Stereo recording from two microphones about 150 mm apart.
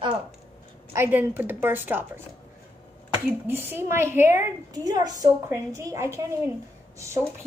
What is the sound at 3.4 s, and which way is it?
A woman's voice, 15° right (ahead or behind).